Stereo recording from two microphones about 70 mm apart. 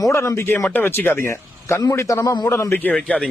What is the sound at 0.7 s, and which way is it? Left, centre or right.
A man's voice, left.